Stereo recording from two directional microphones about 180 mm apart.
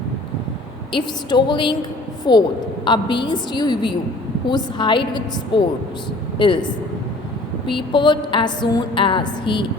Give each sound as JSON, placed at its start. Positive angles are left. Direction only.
{"t": 0.9, "sound": "a woman's voice", "side_deg": 25}
{"t": 7.7, "sound": "a woman's voice", "side_deg": 25}